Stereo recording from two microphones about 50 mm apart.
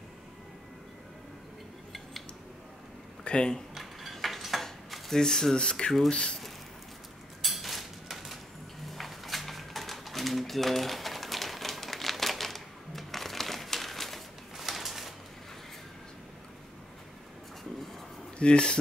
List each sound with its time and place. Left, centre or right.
3.3 s speech: centre
3.7 s dishes: centre
6.0 s speech: centre
7.4 s a sound: centre
18.4 s speech: centre